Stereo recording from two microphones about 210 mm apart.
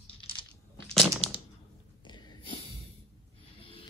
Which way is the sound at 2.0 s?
20° left (ahead or behind).